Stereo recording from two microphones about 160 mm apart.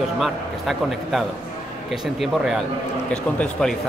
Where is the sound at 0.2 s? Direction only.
Centre (ahead or behind).